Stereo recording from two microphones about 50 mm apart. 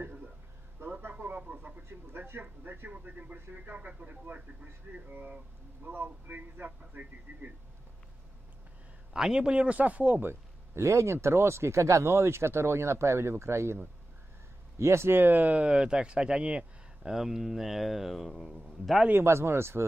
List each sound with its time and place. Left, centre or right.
0.8 s a sound: right
1.2 s radio: right
1.9 s speech: right
9.1 s speech: centre
10.2 s speech: right
14.8 s speech: right
17.1 s a man's voice: centre
19.2 s speech: right